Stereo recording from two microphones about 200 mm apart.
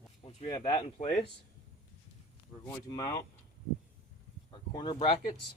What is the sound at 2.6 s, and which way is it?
Speech, 20° left (ahead or behind).